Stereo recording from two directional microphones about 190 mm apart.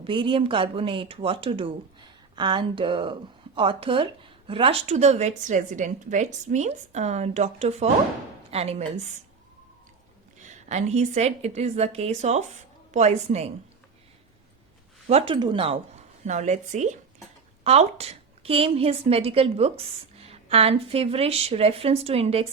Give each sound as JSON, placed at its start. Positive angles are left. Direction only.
{"t": 0.0, "sound": "speech", "side_deg": -25}
{"t": 10.7, "sound": "speech", "side_deg": -35}
{"t": 15.0, "sound": "speech", "side_deg": -30}
{"t": 16.2, "sound": "speech", "side_deg": -40}